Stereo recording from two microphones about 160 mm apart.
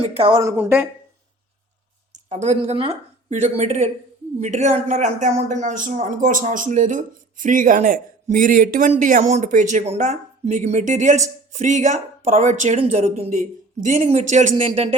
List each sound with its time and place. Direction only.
0.1 s a woman's voice: 35° right (ahead or behind)
0.4 s a woman's voice: 15° right (ahead or behind)
2.3 s speech: 45° right (ahead or behind)